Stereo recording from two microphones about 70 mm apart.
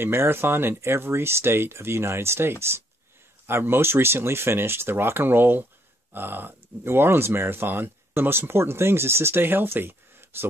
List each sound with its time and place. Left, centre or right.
0.0 s speech: right